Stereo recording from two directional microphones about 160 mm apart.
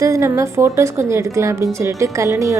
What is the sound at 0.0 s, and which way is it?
A woman's voice, 20° right (ahead or behind).